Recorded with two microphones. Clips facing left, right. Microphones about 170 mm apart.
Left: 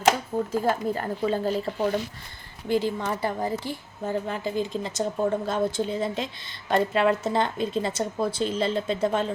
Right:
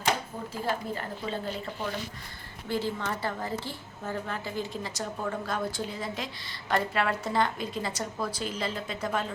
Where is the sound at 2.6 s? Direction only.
15° left (ahead or behind).